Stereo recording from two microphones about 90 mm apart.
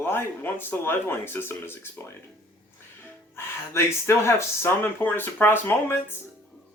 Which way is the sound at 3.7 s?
30° left (ahead or behind).